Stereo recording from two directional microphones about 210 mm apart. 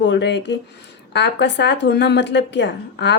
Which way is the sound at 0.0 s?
60° left (ahead or behind).